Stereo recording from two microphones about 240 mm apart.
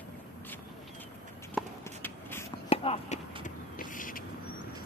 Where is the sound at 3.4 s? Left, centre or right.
Left.